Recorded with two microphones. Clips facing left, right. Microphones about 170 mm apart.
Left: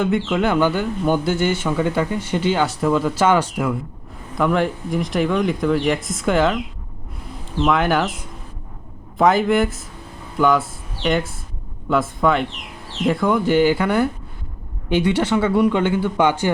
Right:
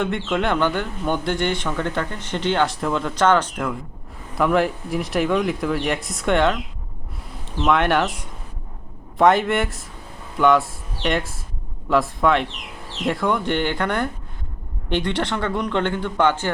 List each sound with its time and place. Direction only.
0.0 s a man's voice: centre (ahead or behind)
7.6 s a man's voice: centre (ahead or behind)